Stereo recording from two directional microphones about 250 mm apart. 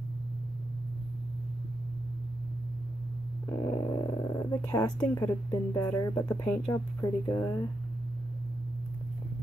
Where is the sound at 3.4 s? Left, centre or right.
Centre.